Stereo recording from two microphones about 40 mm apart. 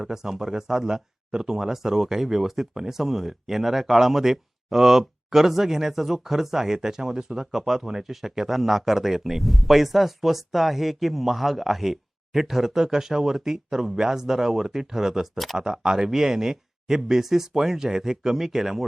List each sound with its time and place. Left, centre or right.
0.0 s speech: centre